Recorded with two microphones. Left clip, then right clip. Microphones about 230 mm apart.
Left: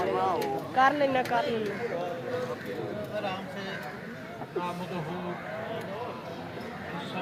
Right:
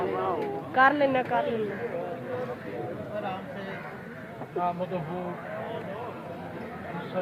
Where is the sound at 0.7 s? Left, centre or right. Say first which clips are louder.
Right 2 dB; right.